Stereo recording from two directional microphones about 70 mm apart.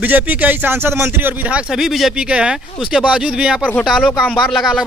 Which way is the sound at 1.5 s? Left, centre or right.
Centre.